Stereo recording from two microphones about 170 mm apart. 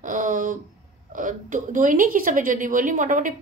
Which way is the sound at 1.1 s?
50° right (ahead or behind).